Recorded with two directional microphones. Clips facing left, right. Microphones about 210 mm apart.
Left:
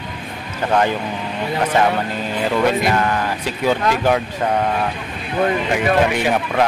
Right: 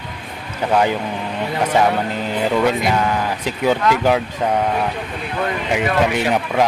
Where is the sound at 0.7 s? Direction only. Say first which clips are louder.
Right 1 dB; 5° right (ahead or behind).